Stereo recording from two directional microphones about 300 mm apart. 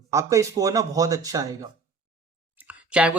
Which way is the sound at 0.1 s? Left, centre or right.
Centre.